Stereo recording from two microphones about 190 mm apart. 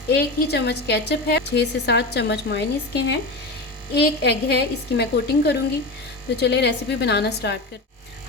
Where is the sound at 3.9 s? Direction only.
60° left (ahead or behind).